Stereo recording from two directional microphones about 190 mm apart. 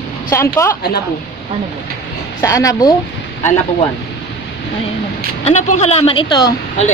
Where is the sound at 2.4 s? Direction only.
15° left (ahead or behind).